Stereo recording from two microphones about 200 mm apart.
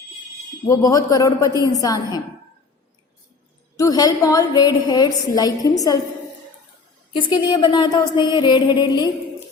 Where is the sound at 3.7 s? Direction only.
15° left (ahead or behind).